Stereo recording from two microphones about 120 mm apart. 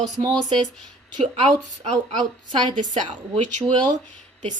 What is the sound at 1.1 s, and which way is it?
Speech, 45° right (ahead or behind).